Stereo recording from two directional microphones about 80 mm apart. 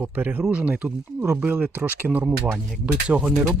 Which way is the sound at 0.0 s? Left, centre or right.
Right.